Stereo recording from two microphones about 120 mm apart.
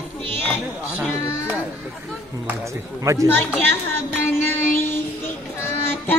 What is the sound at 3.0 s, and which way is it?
Speech, 25° right (ahead or behind).